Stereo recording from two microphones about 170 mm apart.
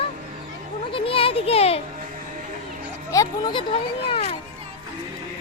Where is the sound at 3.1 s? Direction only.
20° left (ahead or behind).